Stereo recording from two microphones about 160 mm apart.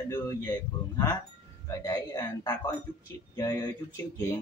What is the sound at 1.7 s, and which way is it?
Speech, 25° left (ahead or behind).